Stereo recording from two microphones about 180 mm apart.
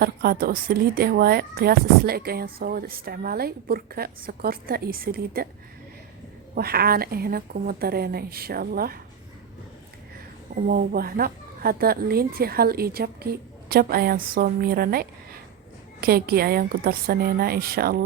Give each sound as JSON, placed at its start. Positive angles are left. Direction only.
{"t": 0.0, "sound": "speech", "side_deg": -55}
{"t": 6.5, "sound": "speech", "side_deg": -60}
{"t": 10.5, "sound": "speech", "side_deg": -55}